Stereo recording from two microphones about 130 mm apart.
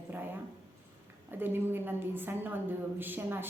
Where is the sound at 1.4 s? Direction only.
15° right (ahead or behind).